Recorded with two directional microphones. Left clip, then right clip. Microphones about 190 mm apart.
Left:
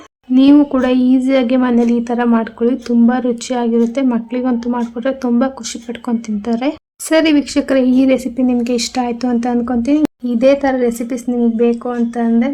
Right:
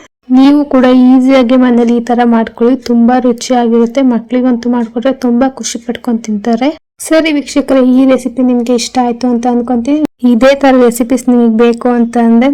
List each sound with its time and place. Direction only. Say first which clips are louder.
0.3 s a woman's voice: right 3 dB; 30° right (ahead or behind)
10.2 s speech: right 7 dB; 40° right (ahead or behind)